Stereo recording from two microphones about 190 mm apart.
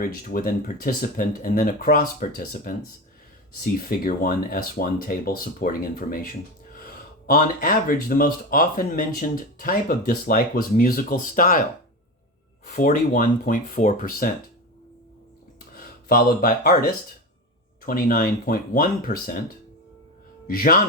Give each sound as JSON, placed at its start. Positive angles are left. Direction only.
{"t": 0.0, "sound": "speech", "side_deg": 50}
{"t": 12.6, "sound": "speech", "side_deg": 45}
{"t": 16.0, "sound": "speech", "side_deg": 50}
{"t": 20.5, "sound": "speech", "side_deg": 50}